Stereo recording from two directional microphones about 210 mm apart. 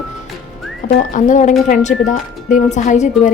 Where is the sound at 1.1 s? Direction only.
35° left (ahead or behind).